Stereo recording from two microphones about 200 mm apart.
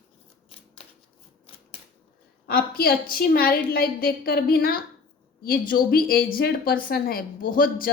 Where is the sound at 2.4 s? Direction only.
50° left (ahead or behind).